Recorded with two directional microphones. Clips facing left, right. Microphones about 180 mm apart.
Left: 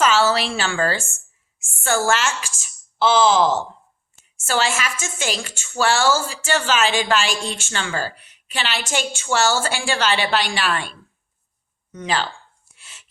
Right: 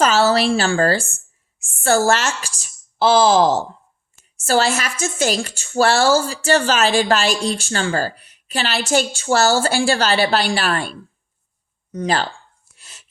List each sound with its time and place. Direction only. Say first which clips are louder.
0.0 s a woman's voice: right 3 dB; 40° right (ahead or behind)
12.7 s whispering: right 1 dB; 40° right (ahead or behind)